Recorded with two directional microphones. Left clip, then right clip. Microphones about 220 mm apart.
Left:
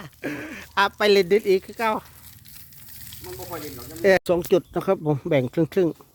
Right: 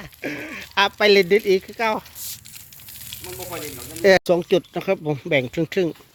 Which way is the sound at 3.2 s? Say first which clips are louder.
Right 2 dB; 20° right (ahead or behind).